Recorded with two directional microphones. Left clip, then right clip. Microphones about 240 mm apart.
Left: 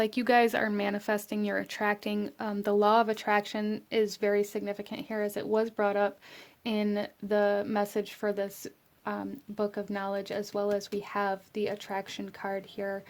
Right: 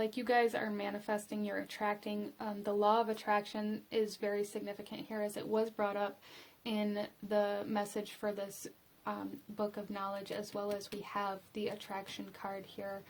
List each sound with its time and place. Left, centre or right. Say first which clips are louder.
0.0 s speech: left 7 dB; left